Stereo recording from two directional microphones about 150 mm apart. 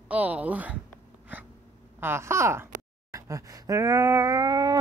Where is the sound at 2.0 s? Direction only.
15° right (ahead or behind).